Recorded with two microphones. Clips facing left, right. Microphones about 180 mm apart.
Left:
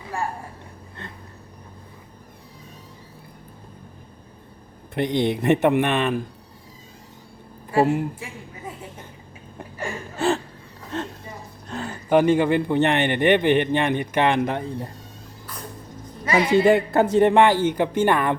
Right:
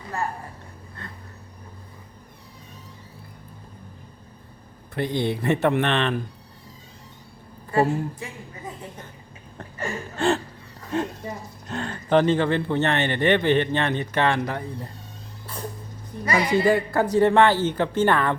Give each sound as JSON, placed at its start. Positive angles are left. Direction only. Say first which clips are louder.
{"t": 4.9, "sound": "speech", "louder": "left 3 dB", "side_deg": 20}
{"t": 7.7, "sound": "speech", "louder": "left 2 dB", "side_deg": 10}
{"t": 9.6, "sound": "a sound", "louder": "even", "side_deg": 10}
{"t": 10.9, "sound": "speech", "louder": "right 4 dB", "side_deg": -10}
{"t": 11.7, "sound": "speech", "louder": "left 1 dB", "side_deg": 5}
{"t": 16.6, "sound": "speech", "louder": "left 3 dB", "side_deg": 20}